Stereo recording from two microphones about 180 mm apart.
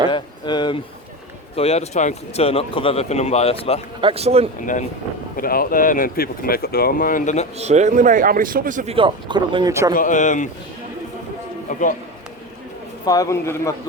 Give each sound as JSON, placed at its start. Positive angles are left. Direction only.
{"t": 0.1, "sound": "a sound", "side_deg": 25}
{"t": 1.5, "sound": "speech", "side_deg": 35}
{"t": 4.0, "sound": "speech", "side_deg": -35}
{"t": 5.4, "sound": "speech", "side_deg": 55}
{"t": 7.6, "sound": "a man's voice", "side_deg": -40}
{"t": 8.9, "sound": "speech", "side_deg": -30}
{"t": 9.9, "sound": "speech", "side_deg": 45}
{"t": 11.7, "sound": "speech", "side_deg": 45}
{"t": 13.1, "sound": "a man's voice", "side_deg": 20}